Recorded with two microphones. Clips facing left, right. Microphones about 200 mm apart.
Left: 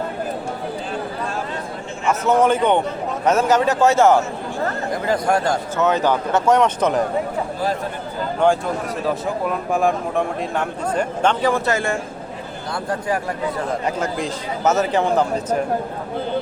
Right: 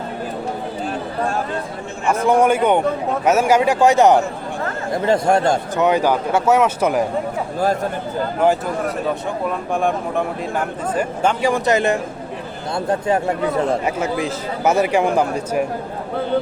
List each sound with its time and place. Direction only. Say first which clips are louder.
2.2 s a man's voice: right 1 dB; 10° right (ahead or behind)
8.4 s speech: even; 5° right (ahead or behind)
9.7 s a man's voice: left 1 dB; centre (ahead or behind); by 13.7 s 25° right (ahead or behind)
14.3 s a man's voice: right 1 dB; 10° right (ahead or behind)